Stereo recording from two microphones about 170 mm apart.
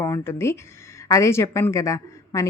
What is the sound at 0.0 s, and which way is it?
A woman's voice, 15° left (ahead or behind).